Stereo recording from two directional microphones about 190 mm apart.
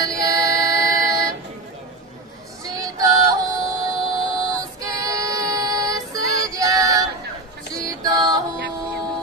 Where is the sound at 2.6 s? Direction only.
20° right (ahead or behind).